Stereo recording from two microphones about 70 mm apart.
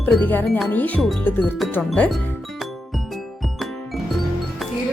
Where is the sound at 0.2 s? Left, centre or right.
Left.